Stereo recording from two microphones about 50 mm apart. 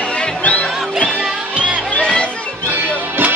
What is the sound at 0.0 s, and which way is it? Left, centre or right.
Music, centre.